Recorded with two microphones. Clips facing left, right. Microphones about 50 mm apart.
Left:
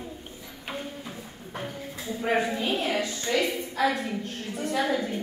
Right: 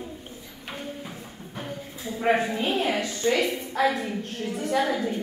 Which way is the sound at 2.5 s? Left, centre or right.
Right.